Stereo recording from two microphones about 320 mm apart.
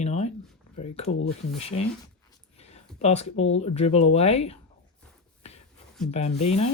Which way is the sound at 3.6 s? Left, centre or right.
Centre.